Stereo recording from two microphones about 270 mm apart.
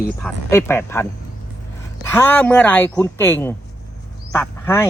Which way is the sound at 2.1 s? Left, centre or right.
Centre.